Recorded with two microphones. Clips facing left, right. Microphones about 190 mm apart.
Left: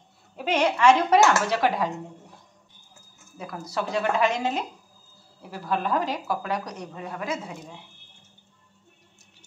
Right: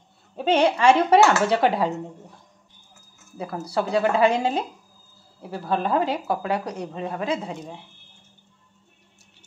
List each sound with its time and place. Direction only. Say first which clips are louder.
0.4 s a woman's voice: right 3 dB; 30° right (ahead or behind)
3.3 s a woman's voice: right 5 dB; 30° right (ahead or behind)